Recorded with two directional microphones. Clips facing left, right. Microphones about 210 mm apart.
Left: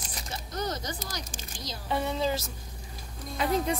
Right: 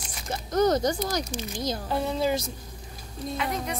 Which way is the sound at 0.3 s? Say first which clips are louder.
Right 11 dB; 45° right (ahead or behind).